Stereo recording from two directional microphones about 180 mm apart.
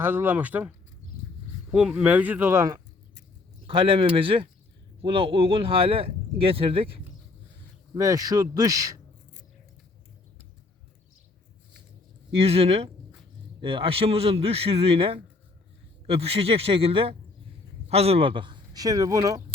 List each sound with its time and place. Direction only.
0.0 s speech: 10° right (ahead or behind)
1.7 s speech: 5° right (ahead or behind)
3.7 s speech: 30° right (ahead or behind)
7.9 s speech: 20° right (ahead or behind)
12.3 s speech: 35° right (ahead or behind)